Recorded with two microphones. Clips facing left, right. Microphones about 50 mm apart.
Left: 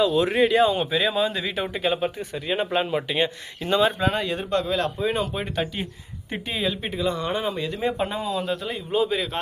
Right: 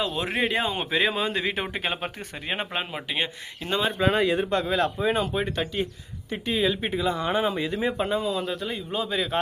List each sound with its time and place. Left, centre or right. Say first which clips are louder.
0.0 s speech: left 7 dB; right
2.3 s speech: left 2 dB; right
2.6 s speech: left 7 dB; centre
7.8 s speech: left 1 dB; centre